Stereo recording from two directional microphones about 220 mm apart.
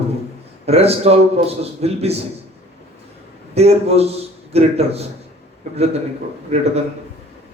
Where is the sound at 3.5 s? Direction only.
30° right (ahead or behind).